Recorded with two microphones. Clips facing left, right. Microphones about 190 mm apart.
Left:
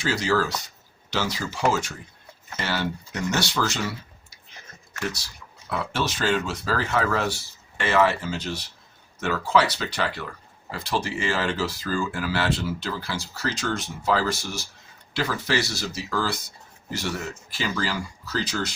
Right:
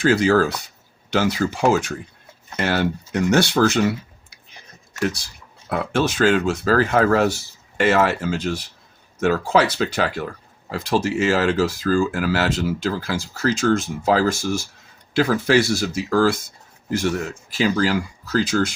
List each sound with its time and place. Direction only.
0.0 s speech: 55° right (ahead or behind)
5.6 s speech: 55° right (ahead or behind)
17.6 s speech: 45° right (ahead or behind)